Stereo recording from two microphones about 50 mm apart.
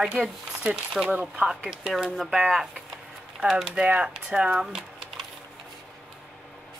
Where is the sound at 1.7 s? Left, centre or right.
Centre.